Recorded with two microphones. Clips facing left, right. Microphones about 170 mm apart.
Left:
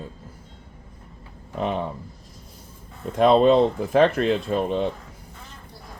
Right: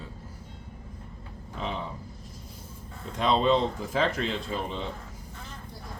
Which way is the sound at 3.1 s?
55° left (ahead or behind).